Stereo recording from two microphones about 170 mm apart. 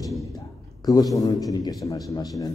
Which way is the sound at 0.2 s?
20° left (ahead or behind).